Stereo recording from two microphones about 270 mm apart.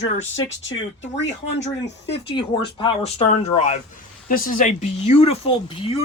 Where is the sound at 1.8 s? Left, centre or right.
Left.